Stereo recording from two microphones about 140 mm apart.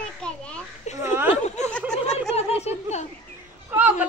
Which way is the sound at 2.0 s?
50° left (ahead or behind).